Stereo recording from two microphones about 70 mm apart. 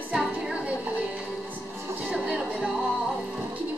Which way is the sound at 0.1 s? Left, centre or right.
Centre.